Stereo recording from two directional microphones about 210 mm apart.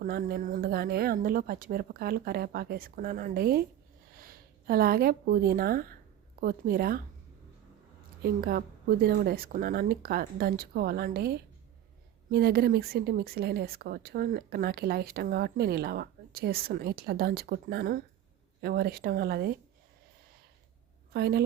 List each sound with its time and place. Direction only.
0.0 s speech: 45° right (ahead or behind)
8.2 s speech: 45° right (ahead or behind)
21.1 s a woman's voice: 45° right (ahead or behind)